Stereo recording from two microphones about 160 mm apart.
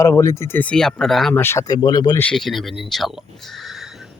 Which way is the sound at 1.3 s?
15° left (ahead or behind).